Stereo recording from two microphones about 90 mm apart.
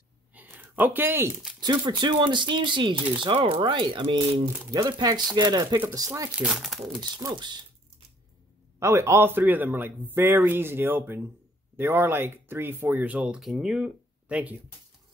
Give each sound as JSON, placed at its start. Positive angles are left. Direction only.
{"t": 0.3, "sound": "a sound", "side_deg": -20}
{"t": 1.6, "sound": "speech", "side_deg": -55}
{"t": 4.5, "sound": "speech", "side_deg": -25}
{"t": 4.8, "sound": "speech", "side_deg": -50}
{"t": 6.5, "sound": "speech", "side_deg": 0}
{"t": 7.3, "sound": "speech", "side_deg": -55}
{"t": 8.7, "sound": "speech", "side_deg": -35}